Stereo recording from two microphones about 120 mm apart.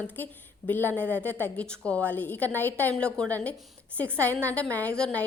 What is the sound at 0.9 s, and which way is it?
Speech, 15° right (ahead or behind).